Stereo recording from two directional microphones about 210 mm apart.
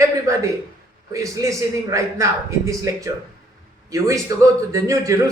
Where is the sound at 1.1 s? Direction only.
15° right (ahead or behind).